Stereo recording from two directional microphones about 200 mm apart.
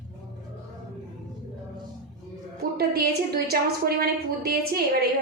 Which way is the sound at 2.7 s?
50° right (ahead or behind).